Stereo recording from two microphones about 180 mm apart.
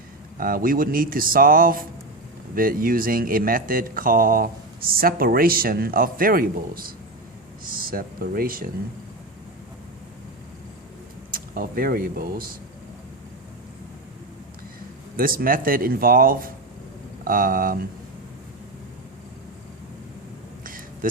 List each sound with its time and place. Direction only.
0.3 s speech: 50° right (ahead or behind)
11.3 s speech: 55° right (ahead or behind)
15.1 s speech: 50° right (ahead or behind)
20.7 s a sound: 50° right (ahead or behind)